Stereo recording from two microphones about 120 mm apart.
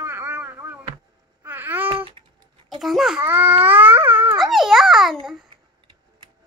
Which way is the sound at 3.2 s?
15° right (ahead or behind).